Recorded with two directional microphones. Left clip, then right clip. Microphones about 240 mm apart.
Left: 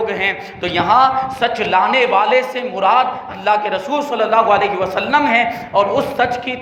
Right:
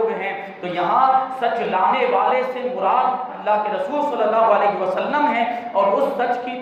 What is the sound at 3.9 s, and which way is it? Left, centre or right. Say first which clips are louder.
A man's voice: left 3 dB; left.